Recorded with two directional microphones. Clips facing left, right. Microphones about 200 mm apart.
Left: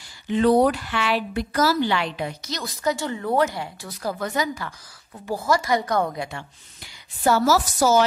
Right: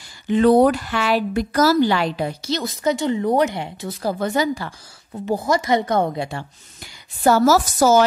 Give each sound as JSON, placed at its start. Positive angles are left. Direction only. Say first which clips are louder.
{"t": 0.3, "sound": "a woman's voice", "louder": "right 4 dB", "side_deg": -50}
{"t": 5.2, "sound": "a woman's voice", "louder": "right 3 dB", "side_deg": -20}
{"t": 6.8, "sound": "a woman's voice", "louder": "right 4 dB", "side_deg": -45}